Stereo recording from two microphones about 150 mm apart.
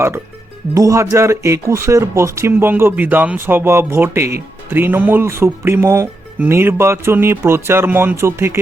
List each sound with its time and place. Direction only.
0.7 s speech: 20° right (ahead or behind)